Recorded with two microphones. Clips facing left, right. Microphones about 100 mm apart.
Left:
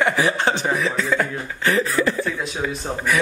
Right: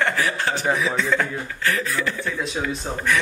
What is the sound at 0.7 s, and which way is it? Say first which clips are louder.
Speech: even; centre (ahead or behind).